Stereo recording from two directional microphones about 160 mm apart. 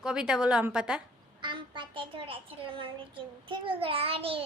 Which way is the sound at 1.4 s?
30° right (ahead or behind).